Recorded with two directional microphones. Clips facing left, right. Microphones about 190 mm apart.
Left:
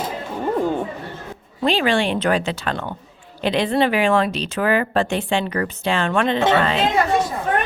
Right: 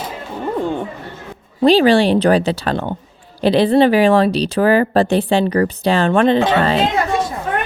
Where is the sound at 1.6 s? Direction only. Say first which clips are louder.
Right 8 dB; 35° right (ahead or behind).